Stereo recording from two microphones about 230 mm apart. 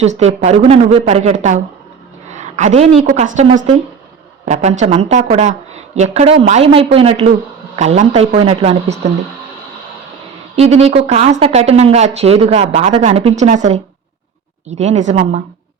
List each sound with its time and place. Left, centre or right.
0.0 s a woman's voice: right
10.5 s speech: right